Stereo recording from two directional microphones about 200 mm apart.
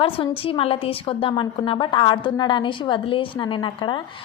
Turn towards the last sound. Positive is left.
turn(degrees=25)  # may be behind; listen again after turning